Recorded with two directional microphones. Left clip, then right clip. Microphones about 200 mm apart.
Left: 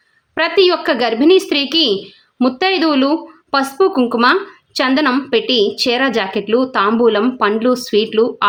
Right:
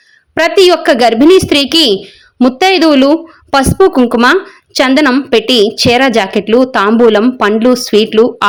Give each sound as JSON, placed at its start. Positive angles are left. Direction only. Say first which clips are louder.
{"t": 0.3, "sound": "a woman's voice", "louder": "right 6 dB", "side_deg": -30}